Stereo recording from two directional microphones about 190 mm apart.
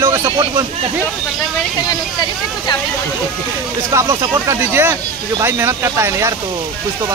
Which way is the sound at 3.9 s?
15° right (ahead or behind).